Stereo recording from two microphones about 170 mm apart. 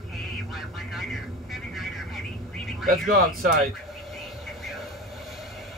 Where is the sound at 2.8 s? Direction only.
60° right (ahead or behind).